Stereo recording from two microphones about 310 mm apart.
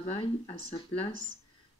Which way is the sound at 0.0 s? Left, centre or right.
Centre.